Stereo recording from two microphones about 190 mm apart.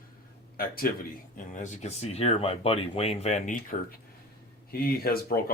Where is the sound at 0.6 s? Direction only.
50° left (ahead or behind).